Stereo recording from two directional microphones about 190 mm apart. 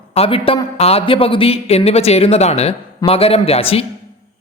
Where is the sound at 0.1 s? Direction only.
30° left (ahead or behind).